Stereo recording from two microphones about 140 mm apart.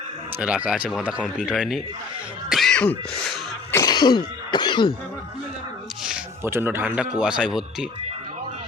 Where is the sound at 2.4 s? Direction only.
Centre (ahead or behind).